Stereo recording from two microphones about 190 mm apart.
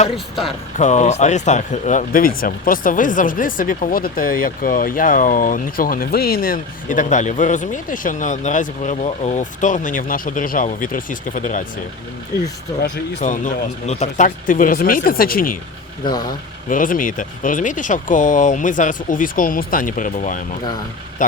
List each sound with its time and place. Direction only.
0.8 s speech: 40° left (ahead or behind)
13.1 s speech: 40° left (ahead or behind)
16.0 s speech: 20° left (ahead or behind)
16.6 s speech: 45° left (ahead or behind)